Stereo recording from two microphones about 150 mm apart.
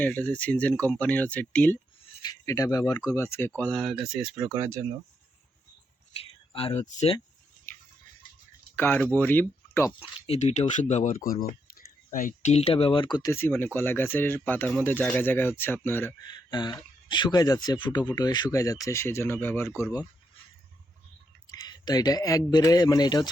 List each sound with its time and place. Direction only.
0.0 s speech: 10° left (ahead or behind)
2.2 s speech: 25° left (ahead or behind)
3.6 s speech: 5° left (ahead or behind)
4.5 s speech: 15° right (ahead or behind)
6.1 s speech: 40° left (ahead or behind)
8.7 s speech: 15° left (ahead or behind)
9.9 s speech: 40° left (ahead or behind)
11.2 s speech: 70° left (ahead or behind); by 13.3 s 30° left (ahead or behind)
13.3 s speech: 15° left (ahead or behind)
16.2 s speech: 30° left (ahead or behind)
21.5 s speech: 25° left (ahead or behind)